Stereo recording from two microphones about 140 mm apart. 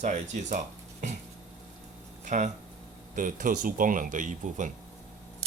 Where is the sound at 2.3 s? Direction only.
60° right (ahead or behind).